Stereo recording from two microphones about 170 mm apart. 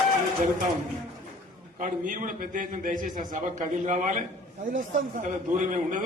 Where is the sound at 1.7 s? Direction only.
50° right (ahead or behind).